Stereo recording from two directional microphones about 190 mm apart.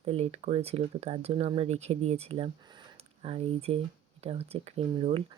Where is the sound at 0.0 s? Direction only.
30° right (ahead or behind).